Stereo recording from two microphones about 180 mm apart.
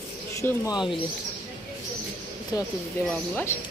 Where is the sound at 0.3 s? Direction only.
15° left (ahead or behind).